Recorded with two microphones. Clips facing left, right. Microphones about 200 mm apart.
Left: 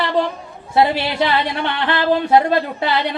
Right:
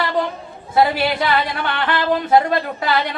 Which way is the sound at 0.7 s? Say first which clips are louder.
Even; 25° left (ahead or behind).